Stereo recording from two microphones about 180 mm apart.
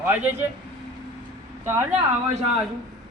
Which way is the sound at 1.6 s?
15° right (ahead or behind).